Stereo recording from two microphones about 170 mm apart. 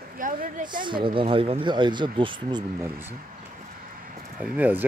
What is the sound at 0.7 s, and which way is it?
Speech, 30° right (ahead or behind).